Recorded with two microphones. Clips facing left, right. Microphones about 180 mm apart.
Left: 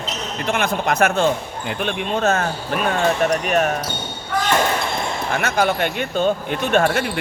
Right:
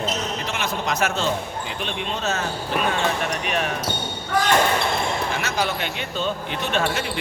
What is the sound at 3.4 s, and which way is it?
Speech, 45° left (ahead or behind).